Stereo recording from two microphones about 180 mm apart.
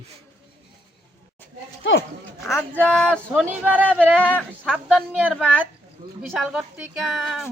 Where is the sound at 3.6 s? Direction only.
10° right (ahead or behind).